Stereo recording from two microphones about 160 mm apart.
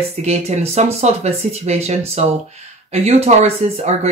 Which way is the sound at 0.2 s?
45° right (ahead or behind).